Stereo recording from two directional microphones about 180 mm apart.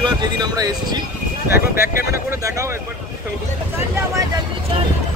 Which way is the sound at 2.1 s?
15° right (ahead or behind).